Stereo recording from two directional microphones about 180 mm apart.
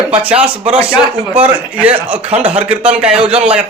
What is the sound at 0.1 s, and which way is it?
A man's voice, 5° right (ahead or behind).